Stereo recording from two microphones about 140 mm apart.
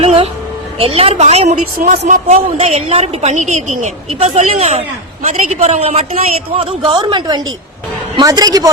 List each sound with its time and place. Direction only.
0.0 s a sound: 45° right (ahead or behind)
0.8 s a woman's voice: 45° right (ahead or behind)
1.8 s a woman's voice: 65° right (ahead or behind); by 8.7 s 25° right (ahead or behind)